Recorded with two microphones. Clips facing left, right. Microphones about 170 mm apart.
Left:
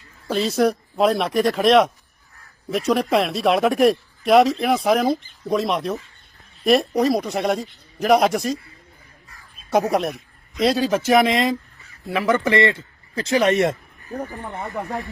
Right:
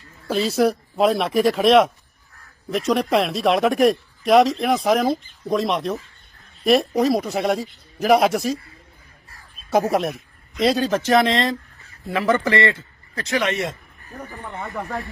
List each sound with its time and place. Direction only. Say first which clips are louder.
0.3 s speech: even; centre (ahead or behind)
9.6 s speech: even; centre (ahead or behind)
11.0 s a man's voice: left 1 dB; 15° left (ahead or behind)
13.1 s speech: left 5 dB; 35° left (ahead or behind); by 13.7 s 50° left (ahead or behind)
14.3 s speech: left 2 dB; 20° left (ahead or behind)